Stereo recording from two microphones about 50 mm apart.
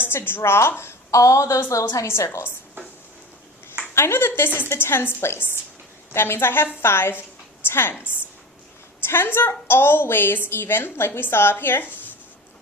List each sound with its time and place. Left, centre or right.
0.1 s a woman's voice: left
0.8 s a woman's voice: left
1.7 s a woman's voice: left
3.9 s a woman's voice: left